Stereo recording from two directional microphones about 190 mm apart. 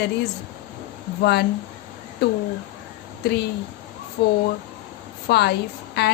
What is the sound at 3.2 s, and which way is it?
A woman's voice, 60° left (ahead or behind).